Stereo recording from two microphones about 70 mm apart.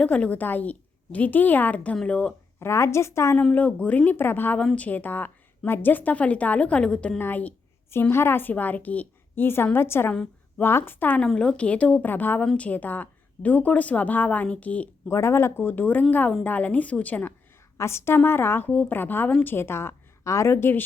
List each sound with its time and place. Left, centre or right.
0.0 s a woman's voice: centre
2.6 s a woman's voice: left
3.3 s a woman's voice: left
4.6 s a woman's voice: centre
7.2 s a woman's voice: left
11.2 s a woman's voice: centre
15.0 s a woman's voice: left
17.7 s a woman's voice: left
19.5 s a woman's voice: left